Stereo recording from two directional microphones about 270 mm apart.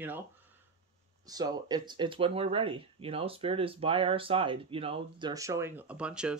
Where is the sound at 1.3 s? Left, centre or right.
Centre.